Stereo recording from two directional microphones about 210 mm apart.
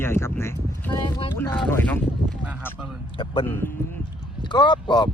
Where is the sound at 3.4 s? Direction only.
10° left (ahead or behind).